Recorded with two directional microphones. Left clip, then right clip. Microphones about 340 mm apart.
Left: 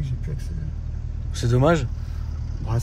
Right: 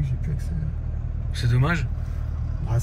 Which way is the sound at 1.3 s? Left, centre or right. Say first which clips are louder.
Left 7 dB; centre.